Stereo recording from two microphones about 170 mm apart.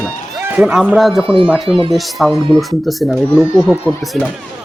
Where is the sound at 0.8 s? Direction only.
5° right (ahead or behind).